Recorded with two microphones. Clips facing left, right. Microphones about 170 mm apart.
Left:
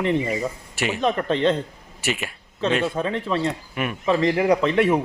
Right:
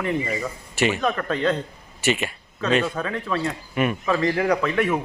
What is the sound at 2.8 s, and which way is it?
Speech, 25° left (ahead or behind).